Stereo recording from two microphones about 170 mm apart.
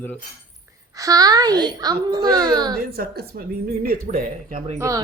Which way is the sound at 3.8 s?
55° right (ahead or behind).